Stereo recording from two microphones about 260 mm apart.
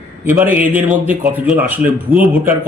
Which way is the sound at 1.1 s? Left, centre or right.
Centre.